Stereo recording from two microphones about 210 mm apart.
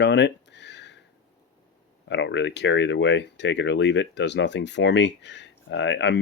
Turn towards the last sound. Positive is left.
turn(degrees=60)  # may be behind; listen again after turning